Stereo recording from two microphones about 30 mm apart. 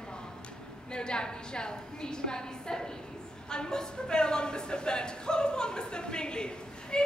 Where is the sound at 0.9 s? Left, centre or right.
Left.